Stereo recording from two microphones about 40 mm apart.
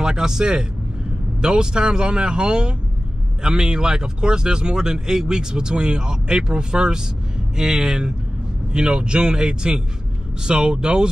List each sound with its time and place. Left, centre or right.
0.0 s speech: centre